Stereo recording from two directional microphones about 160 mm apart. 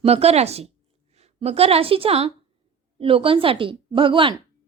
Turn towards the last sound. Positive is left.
turn(degrees=-30)  # may be behind; listen again after turning